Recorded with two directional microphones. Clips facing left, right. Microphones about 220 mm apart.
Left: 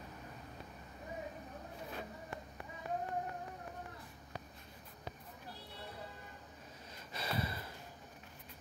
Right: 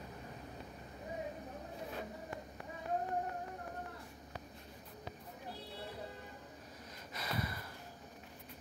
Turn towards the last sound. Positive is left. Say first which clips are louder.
# left 1 dB
turn(degrees=30)  # may be behind; listen again after turning